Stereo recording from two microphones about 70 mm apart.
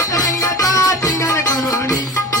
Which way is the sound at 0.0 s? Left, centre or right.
Left.